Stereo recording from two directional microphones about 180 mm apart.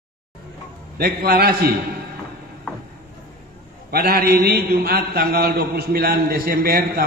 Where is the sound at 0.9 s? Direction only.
60° right (ahead or behind).